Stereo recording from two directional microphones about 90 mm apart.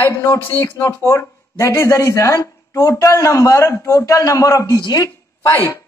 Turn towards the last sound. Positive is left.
turn(degrees=40)  # may be behind; listen again after turning